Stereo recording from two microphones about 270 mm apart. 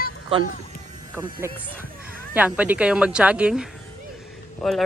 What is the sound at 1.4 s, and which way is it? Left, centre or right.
A woman's voice, centre.